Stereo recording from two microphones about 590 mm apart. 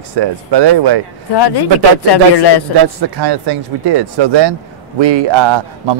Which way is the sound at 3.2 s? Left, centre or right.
Right.